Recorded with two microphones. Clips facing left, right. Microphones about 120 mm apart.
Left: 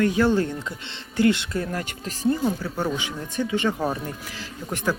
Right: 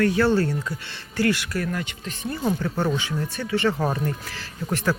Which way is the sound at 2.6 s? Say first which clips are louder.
Right 2 dB; 10° left (ahead or behind).